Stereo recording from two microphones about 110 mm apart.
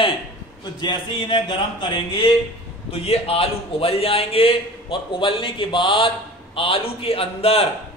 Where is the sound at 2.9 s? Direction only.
65° left (ahead or behind).